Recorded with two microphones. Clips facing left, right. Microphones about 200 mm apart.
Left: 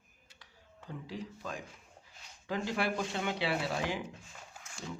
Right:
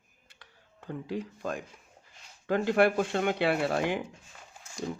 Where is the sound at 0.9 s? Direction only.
55° right (ahead or behind).